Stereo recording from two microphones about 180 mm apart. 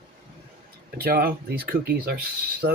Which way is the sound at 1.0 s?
55° right (ahead or behind).